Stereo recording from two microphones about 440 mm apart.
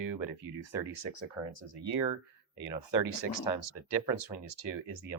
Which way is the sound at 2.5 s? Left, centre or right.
Left.